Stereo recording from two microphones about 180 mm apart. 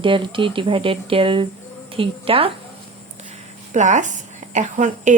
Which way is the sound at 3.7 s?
40° right (ahead or behind).